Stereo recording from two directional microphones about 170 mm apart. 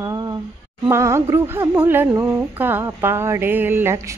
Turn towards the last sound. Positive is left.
turn(degrees=-15)  # may be behind; listen again after turning